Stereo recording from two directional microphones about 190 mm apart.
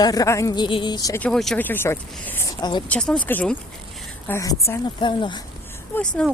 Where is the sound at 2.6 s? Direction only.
20° left (ahead or behind).